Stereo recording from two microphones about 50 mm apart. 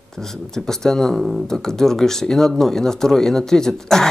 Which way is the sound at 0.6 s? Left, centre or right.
Centre.